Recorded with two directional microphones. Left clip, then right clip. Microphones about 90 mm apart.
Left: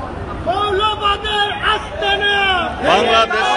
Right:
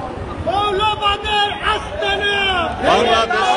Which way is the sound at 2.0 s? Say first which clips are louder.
Left 3 dB; centre (ahead or behind).